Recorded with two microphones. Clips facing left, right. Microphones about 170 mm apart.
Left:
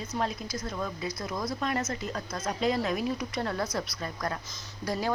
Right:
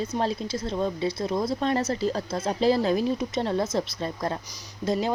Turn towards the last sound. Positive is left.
turn(degrees=-25)  # may be behind; listen again after turning